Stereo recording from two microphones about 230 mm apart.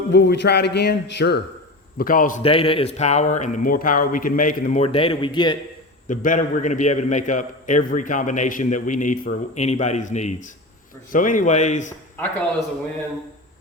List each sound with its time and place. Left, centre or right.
0.1 s a man's voice: left
2.4 s a man's voice: left
6.1 s a man's voice: left